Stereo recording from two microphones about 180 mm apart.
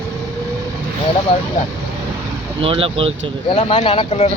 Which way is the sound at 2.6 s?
30° right (ahead or behind).